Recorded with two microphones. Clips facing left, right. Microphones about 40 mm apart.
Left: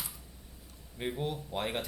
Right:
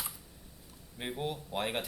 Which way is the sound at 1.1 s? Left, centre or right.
Centre.